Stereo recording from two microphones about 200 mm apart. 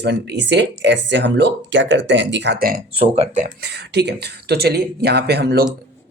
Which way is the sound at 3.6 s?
55° right (ahead or behind).